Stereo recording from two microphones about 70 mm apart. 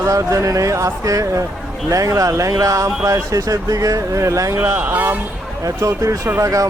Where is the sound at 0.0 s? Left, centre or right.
Right.